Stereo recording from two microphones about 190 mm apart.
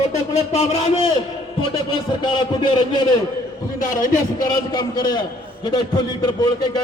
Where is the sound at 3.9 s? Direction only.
45° left (ahead or behind).